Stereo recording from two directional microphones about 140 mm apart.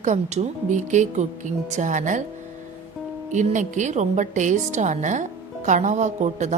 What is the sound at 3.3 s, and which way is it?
A woman's voice, 60° right (ahead or behind).